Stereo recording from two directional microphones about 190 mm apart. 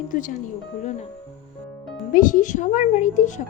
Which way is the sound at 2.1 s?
45° left (ahead or behind).